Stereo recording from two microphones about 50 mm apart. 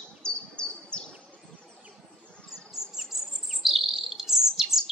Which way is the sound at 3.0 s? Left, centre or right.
Centre.